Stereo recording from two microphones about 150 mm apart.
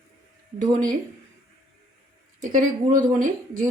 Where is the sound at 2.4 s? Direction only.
60° right (ahead or behind).